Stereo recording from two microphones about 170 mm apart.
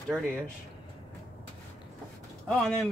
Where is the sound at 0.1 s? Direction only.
5° left (ahead or behind).